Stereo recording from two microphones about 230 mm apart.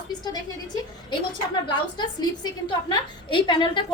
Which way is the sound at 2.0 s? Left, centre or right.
Centre.